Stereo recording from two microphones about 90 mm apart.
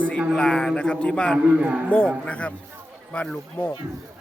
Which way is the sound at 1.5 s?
15° right (ahead or behind).